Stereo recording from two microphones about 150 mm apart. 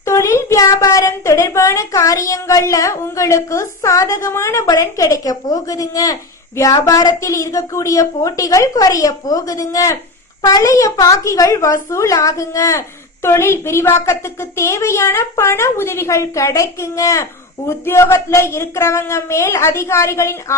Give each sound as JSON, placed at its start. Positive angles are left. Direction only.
{"t": 0.0, "sound": "a woman's voice", "side_deg": 20}